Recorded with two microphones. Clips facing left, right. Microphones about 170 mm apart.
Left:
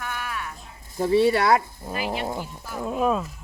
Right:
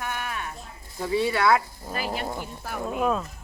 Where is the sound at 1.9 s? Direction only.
40° right (ahead or behind).